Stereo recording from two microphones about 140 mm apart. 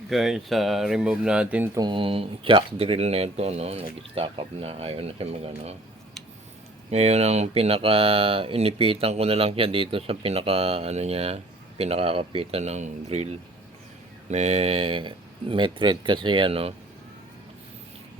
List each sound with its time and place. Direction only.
0.1 s speech: centre (ahead or behind)
1.7 s speech: 30° right (ahead or behind); by 5.7 s 50° right (ahead or behind)
6.9 s speech: 50° right (ahead or behind)